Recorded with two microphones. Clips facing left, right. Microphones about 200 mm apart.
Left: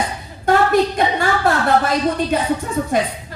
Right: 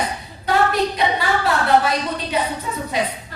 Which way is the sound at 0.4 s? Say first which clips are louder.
Left 4 dB; 50° left (ahead or behind).